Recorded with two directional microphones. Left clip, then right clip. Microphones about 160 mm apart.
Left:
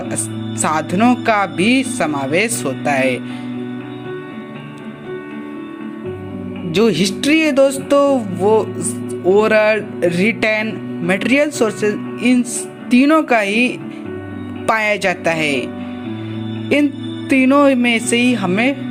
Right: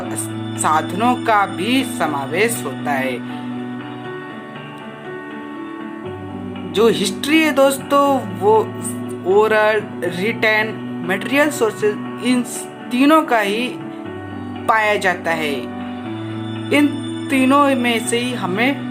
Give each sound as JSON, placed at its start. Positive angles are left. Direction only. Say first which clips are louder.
{"t": 0.6, "sound": "speech", "louder": "left 1 dB", "side_deg": 35}
{"t": 6.7, "sound": "music", "louder": "even", "side_deg": 30}
{"t": 9.3, "sound": "speech", "louder": "left 1 dB", "side_deg": 30}
{"t": 16.7, "sound": "music", "louder": "even", "side_deg": 30}
{"t": 17.2, "sound": "speech", "louder": "left 2 dB", "side_deg": 35}